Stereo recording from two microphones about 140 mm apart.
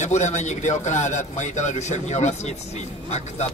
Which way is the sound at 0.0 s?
55° left (ahead or behind).